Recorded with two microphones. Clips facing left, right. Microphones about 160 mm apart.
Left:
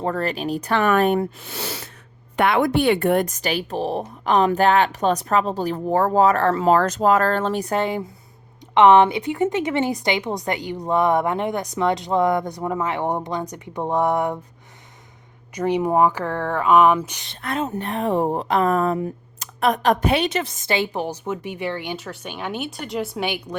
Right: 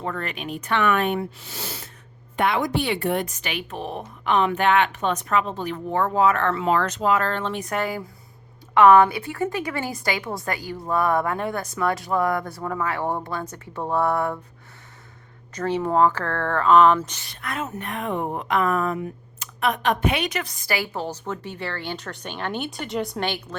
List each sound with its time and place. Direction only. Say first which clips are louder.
0.0 s speech: left 6 dB; 35° left (ahead or behind)
1.4 s speech: left 5 dB; 65° left (ahead or behind)
2.3 s speech: left 4 dB; 65° left (ahead or behind); by 14.3 s 20° left (ahead or behind)
15.5 s speech: left 2 dB; 15° left (ahead or behind)
17.4 s speech: left 5 dB; 30° left (ahead or behind); by 23.6 s 10° left (ahead or behind)